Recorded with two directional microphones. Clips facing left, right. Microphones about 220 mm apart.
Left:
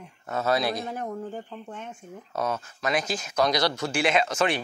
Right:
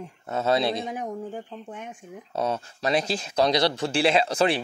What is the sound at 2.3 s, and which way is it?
Speech, 30° right (ahead or behind).